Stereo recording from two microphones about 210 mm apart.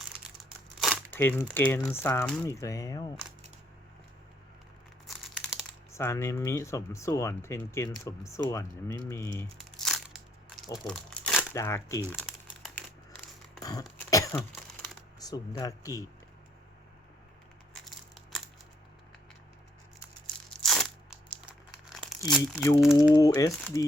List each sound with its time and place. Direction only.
0.8 s crumpling: 5° left (ahead or behind)
1.5 s speech: 10° left (ahead or behind)
5.0 s crumpling: centre (ahead or behind)
5.9 s speech: 15° left (ahead or behind)
9.8 s crunch: centre (ahead or behind)
10.8 s crumpling: 5° left (ahead or behind)
11.5 s speech: 15° left (ahead or behind)
12.1 s crumpling: centre (ahead or behind)
13.6 s throat clearing: 15° left (ahead or behind)
15.2 s speech: 15° left (ahead or behind)
17.7 s crushing: centre (ahead or behind)
20.6 s crunch: centre (ahead or behind)
21.8 s crumpling: centre (ahead or behind)
22.3 s speech: 10° left (ahead or behind)